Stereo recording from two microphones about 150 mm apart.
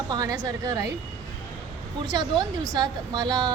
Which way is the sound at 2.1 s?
30° right (ahead or behind).